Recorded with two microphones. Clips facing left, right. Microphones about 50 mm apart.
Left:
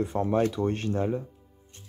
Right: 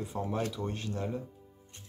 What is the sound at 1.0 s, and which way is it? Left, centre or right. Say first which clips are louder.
Speech: left 5 dB; left.